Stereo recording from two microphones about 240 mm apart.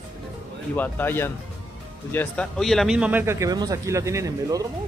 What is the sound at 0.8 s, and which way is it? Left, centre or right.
Speech, centre.